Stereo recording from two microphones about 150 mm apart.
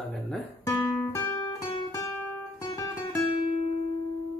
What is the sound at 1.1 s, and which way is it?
Guitar, 20° left (ahead or behind).